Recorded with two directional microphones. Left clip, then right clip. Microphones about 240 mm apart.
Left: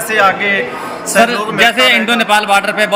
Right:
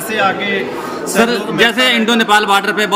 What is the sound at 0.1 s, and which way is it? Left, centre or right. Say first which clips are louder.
Speech: left 4 dB; centre.